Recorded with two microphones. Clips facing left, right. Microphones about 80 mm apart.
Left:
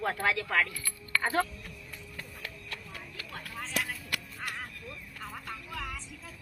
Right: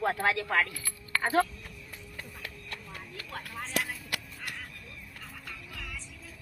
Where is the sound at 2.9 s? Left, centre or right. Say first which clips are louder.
Right 2 dB; centre.